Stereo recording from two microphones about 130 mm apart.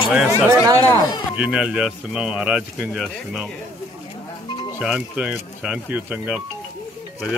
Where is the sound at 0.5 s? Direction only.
25° right (ahead or behind).